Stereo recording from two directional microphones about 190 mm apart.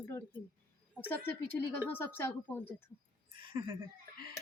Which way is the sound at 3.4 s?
25° right (ahead or behind).